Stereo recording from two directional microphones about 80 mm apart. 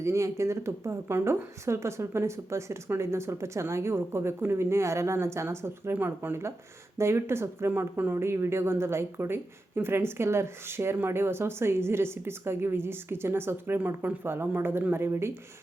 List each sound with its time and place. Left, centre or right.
0.0 s speech: right